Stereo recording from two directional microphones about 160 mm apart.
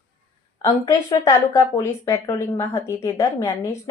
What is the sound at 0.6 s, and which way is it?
A woman's voice, 20° left (ahead or behind).